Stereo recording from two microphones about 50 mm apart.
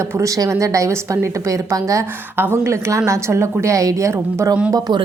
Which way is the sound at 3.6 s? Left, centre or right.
Right.